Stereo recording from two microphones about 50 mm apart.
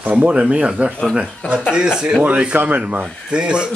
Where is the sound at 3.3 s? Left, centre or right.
Centre.